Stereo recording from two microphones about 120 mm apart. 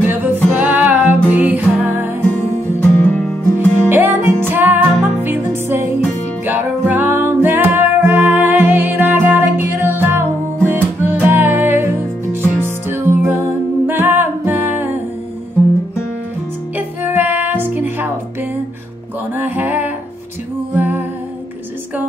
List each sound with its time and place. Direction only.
0.0 s music: 15° right (ahead or behind)
2.8 s music: 15° left (ahead or behind)
3.5 s music: 15° right (ahead or behind)
16.7 s music: 15° right (ahead or behind)
19.3 s music: 15° right (ahead or behind)